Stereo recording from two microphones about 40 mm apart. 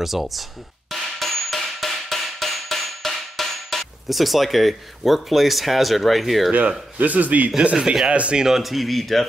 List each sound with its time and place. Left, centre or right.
0.0 s music: centre
7.0 s a man's voice: right
7.6 s speech: right
8.5 s speech: centre